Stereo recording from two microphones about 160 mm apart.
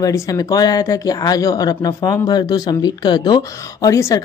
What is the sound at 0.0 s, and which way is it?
Speech, 20° left (ahead or behind).